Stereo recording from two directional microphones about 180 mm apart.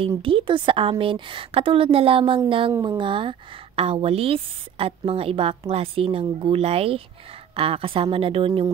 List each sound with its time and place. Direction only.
0.2 s a woman's voice: 30° right (ahead or behind)
2.7 s speech: 15° right (ahead or behind)
3.0 s a woman's voice: 25° right (ahead or behind)